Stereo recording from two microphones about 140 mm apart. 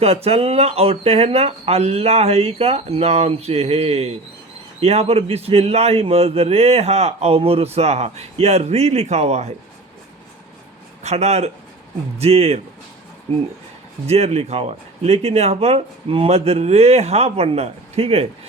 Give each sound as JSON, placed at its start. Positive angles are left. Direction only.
{"t": 0.0, "sound": "a man's voice", "side_deg": -45}
{"t": 11.0, "sound": "a man's voice", "side_deg": -50}
{"t": 14.1, "sound": "a man's voice", "side_deg": -50}